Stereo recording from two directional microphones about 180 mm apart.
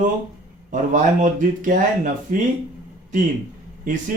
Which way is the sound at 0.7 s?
45° right (ahead or behind).